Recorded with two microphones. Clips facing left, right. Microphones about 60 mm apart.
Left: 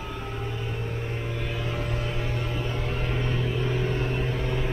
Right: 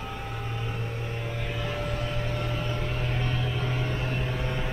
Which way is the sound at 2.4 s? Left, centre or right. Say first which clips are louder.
Left 1 dB; centre.